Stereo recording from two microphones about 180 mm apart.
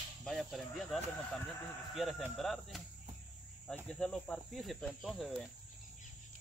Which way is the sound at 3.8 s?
5° left (ahead or behind).